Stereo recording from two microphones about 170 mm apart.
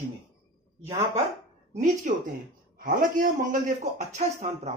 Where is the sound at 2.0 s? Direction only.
50° right (ahead or behind).